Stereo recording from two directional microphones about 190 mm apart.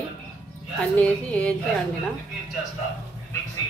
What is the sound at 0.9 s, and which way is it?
Speech, 5° left (ahead or behind).